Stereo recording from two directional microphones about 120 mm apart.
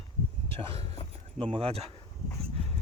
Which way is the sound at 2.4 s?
55° right (ahead or behind).